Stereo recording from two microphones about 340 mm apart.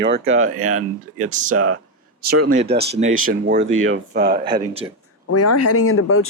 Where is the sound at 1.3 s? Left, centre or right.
Right.